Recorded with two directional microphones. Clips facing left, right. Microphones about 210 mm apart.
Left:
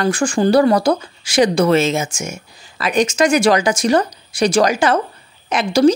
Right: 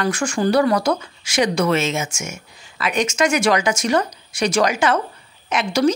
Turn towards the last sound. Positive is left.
turn(degrees=35)  # may be behind; listen again after turning